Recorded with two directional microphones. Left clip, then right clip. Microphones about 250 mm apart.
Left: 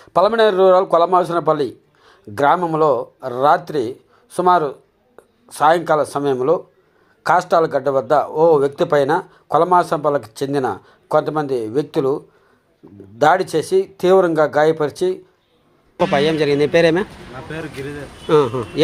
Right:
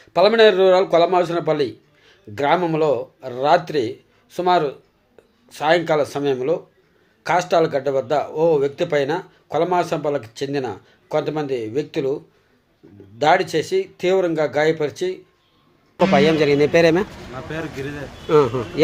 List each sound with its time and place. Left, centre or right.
0.0 s a man's voice: centre
17.5 s speech: centre
18.3 s a man's voice: centre